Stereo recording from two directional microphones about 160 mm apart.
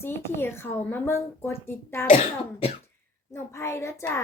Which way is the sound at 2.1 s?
40° left (ahead or behind).